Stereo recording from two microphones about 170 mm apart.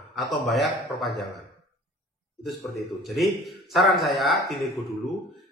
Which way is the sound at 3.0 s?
Centre (ahead or behind).